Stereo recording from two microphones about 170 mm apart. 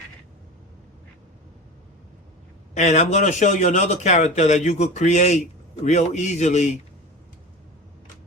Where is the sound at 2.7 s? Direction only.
45° left (ahead or behind).